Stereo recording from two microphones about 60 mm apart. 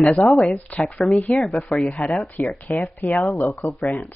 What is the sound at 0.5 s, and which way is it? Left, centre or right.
Speech, left.